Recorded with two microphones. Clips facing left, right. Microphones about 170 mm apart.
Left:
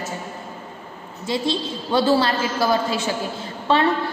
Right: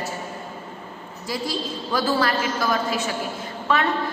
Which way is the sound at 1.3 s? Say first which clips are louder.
Left 4 dB; 25° left (ahead or behind).